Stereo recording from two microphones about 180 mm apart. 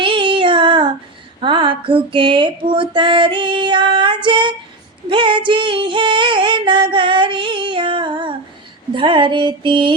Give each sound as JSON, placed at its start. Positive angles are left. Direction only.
{"t": 0.0, "sound": "child singing", "side_deg": -30}
{"t": 1.4, "sound": "a sound", "side_deg": -25}
{"t": 1.9, "sound": "female singing", "side_deg": -30}